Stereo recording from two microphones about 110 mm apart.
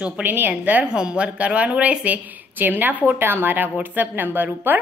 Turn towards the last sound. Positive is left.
turn(degrees=-15)  # may be behind; listen again after turning